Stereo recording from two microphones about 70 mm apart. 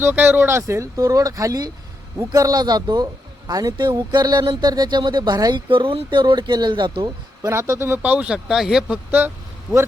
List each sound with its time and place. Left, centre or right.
0.0 s a man's voice: right
7.4 s speech: right
7.9 s speech: right; by 9.8 s centre